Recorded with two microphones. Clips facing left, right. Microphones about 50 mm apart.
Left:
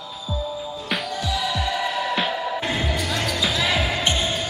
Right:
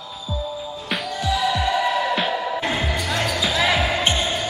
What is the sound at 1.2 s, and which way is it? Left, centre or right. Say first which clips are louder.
Basketball bounce: right 6 dB; centre.